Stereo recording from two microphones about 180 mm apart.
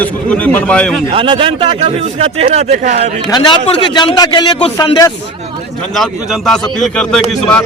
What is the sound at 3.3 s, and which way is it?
A man's voice, 25° left (ahead or behind).